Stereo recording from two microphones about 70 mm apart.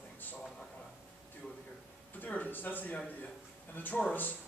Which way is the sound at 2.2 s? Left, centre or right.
Left.